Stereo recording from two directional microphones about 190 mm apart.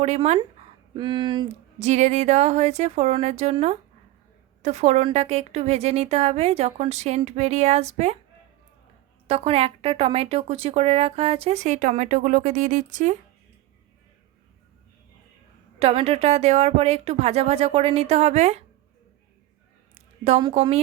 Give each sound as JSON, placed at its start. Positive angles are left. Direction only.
{"t": 0.0, "sound": "speech", "side_deg": -35}
{"t": 1.9, "sound": "speech", "side_deg": -35}
{"t": 9.2, "sound": "speech", "side_deg": -30}
{"t": 15.8, "sound": "speech", "side_deg": -30}
{"t": 19.9, "sound": "a woman's voice", "side_deg": -30}